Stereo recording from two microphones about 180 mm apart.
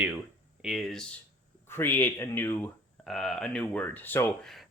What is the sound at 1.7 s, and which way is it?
Speech, 10° left (ahead or behind).